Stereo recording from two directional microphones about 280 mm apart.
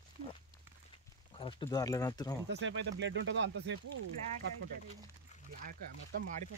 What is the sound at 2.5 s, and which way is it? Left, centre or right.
Speech, right.